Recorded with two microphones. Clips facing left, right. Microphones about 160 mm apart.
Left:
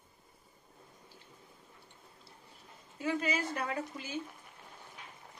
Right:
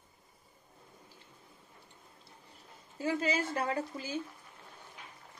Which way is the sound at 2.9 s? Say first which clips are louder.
Right 2 dB; 30° right (ahead or behind).